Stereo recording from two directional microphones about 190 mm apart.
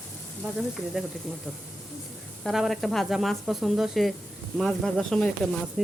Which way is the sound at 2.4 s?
Centre (ahead or behind).